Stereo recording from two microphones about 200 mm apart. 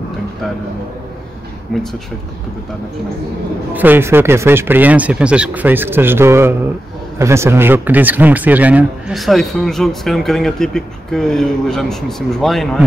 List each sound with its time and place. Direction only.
3.7 s speech: 10° right (ahead or behind)